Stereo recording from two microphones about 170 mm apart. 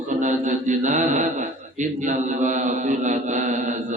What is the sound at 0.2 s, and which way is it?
Mantra, 45° right (ahead or behind).